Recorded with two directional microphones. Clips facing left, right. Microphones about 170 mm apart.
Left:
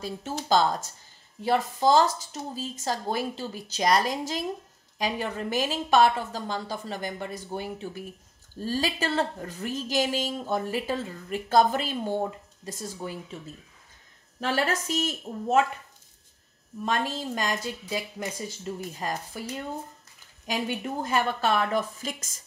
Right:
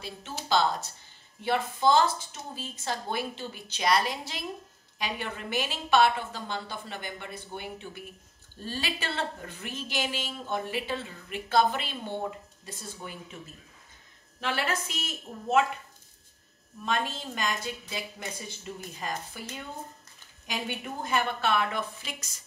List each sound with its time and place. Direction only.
0.5 s a woman's voice: 45° left (ahead or behind)
14.4 s a woman's voice: 40° left (ahead or behind)
16.8 s a woman's voice: 40° left (ahead or behind)
18.9 s a woman's voice: 40° left (ahead or behind)
20.4 s a woman's voice: 40° left (ahead or behind)